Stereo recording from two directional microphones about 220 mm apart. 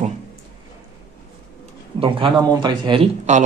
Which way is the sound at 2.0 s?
25° right (ahead or behind).